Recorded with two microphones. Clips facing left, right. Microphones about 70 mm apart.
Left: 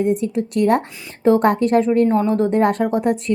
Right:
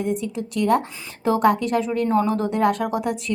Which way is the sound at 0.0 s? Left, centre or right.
Left.